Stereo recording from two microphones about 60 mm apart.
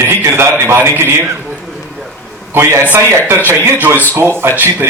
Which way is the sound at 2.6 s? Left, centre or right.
Right.